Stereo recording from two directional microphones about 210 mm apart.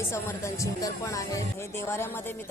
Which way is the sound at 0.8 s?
15° left (ahead or behind).